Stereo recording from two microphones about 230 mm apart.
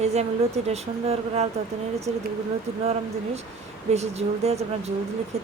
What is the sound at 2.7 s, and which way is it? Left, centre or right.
Speech, right.